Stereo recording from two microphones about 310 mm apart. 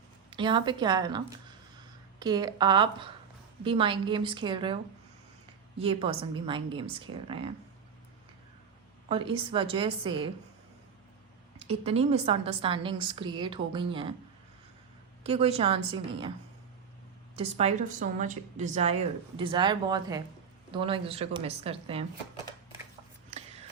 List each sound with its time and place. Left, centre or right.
0.3 s a woman's voice: centre
5.8 s a woman's voice: centre
9.0 s a woman's voice: centre
11.6 s a woman's voice: centre
15.2 s speech: centre
17.3 s speech: centre
23.3 s a sound: right